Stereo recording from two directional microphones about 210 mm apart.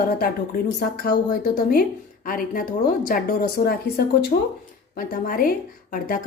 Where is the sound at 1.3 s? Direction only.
40° left (ahead or behind).